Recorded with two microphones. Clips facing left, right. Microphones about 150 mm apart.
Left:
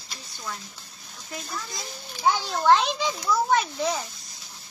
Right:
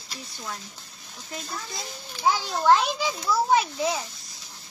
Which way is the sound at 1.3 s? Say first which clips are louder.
Even; 25° right (ahead or behind).